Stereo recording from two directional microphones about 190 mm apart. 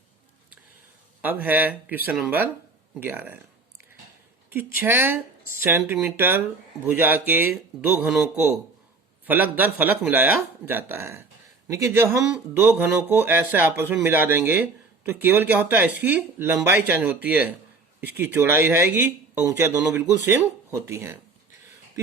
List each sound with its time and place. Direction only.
1.2 s speech: 10° right (ahead or behind)
4.4 s speech: 10° right (ahead or behind)